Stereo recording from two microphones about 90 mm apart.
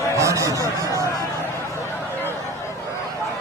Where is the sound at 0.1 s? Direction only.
35° right (ahead or behind).